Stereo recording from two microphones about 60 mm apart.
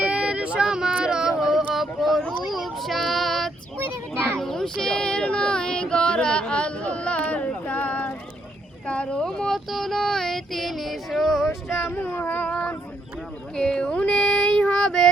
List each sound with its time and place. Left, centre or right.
0.1 s a sound: centre
2.5 s child singing: centre; by 8.1 s left
8.9 s speech: centre
9.4 s child singing: centre
11.4 s a sound: left
13.6 s child singing: centre